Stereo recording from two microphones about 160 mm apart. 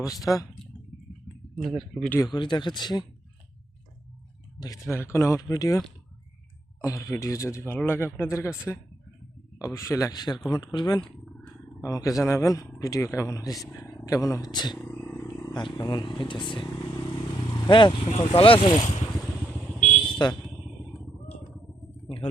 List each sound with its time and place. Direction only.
0.0 s a man's voice: 20° left (ahead or behind)
1.6 s speech: centre (ahead or behind)
2.2 s a man's voice: 25° left (ahead or behind)
4.6 s a man's voice: 20° left (ahead or behind)
6.8 s a man's voice: 20° left (ahead or behind)
14.8 s a sound: 5° left (ahead or behind)
15.4 s speech: 25° left (ahead or behind); by 19.0 s 40° left (ahead or behind)
20.2 s a man's voice: 25° left (ahead or behind)